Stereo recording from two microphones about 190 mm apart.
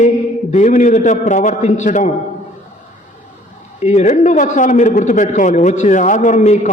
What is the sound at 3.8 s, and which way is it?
A man's voice, 35° left (ahead or behind).